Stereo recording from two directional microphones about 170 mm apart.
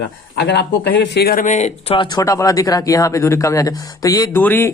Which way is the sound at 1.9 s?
20° left (ahead or behind).